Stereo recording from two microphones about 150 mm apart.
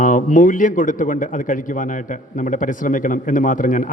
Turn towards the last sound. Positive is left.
turn(degrees=60)  # may be behind; listen again after turning